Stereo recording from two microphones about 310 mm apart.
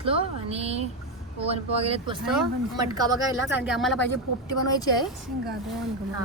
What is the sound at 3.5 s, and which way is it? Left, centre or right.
Speech, centre.